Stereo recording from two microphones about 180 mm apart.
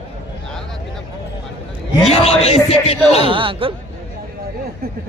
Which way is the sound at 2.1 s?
35° left (ahead or behind).